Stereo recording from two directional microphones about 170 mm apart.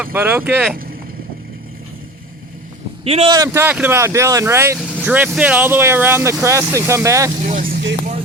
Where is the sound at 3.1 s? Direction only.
35° right (ahead or behind).